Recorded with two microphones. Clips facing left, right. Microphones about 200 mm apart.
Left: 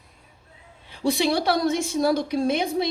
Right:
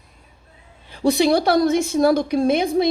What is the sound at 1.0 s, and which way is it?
A woman's voice, 45° right (ahead or behind).